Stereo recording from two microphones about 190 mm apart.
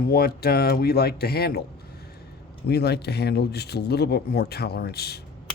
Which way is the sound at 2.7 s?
60° left (ahead or behind).